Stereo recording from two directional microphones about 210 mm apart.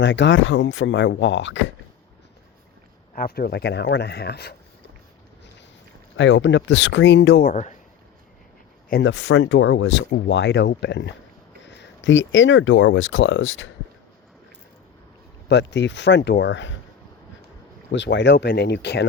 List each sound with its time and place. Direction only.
0.0 s speech: 60° left (ahead or behind)
3.2 s speech: 45° left (ahead or behind)
6.1 s speech: 60° left (ahead or behind)
7.4 s speech: 35° left (ahead or behind)
8.9 s speech: 55° left (ahead or behind)
15.4 s speech: 55° left (ahead or behind)
17.9 s speech: 60° left (ahead or behind)